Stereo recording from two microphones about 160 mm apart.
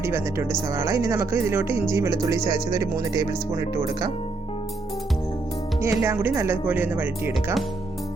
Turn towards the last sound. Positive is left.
turn(degrees=-10)  # may be behind; listen again after turning